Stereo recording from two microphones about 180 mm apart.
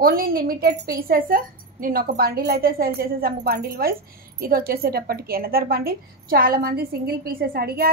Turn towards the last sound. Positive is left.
turn(degrees=-60)  # may be behind; listen again after turning